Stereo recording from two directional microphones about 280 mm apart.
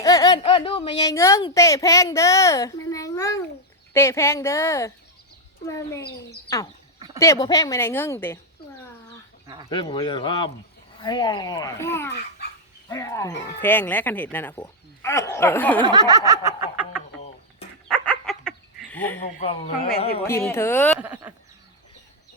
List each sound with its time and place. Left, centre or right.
0.0 s speech: centre
7.2 s speech: centre
9.6 s speech: centre
15.8 s snicker: centre
17.8 s dog: centre
19.2 s speech: left
20.2 s speech: centre
21.0 s snicker: centre